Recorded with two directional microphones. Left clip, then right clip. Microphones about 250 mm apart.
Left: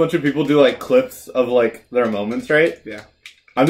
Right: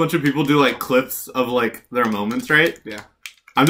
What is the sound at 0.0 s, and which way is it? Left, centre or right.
Speech, centre.